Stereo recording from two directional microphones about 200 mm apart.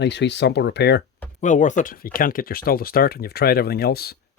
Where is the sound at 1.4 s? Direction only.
40° left (ahead or behind).